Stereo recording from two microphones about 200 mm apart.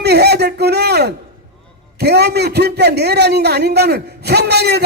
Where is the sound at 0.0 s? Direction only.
55° right (ahead or behind).